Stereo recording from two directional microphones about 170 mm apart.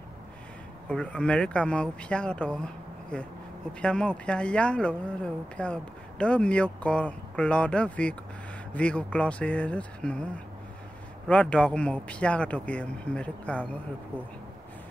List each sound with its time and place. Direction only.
0.8 s speech: 5° left (ahead or behind)